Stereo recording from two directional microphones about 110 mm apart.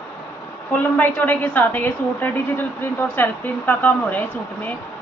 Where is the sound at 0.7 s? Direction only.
15° left (ahead or behind).